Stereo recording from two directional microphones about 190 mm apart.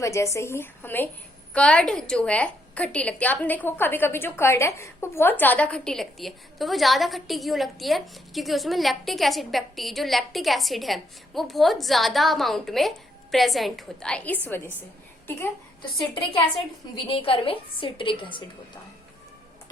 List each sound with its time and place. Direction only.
0.0 s a woman's voice: 15° left (ahead or behind)
16.9 s a woman's voice: 30° left (ahead or behind)